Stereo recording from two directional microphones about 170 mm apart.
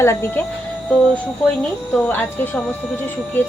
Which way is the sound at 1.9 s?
10° left (ahead or behind).